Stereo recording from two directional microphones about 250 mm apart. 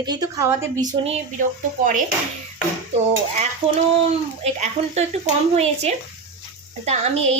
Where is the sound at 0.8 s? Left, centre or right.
Right.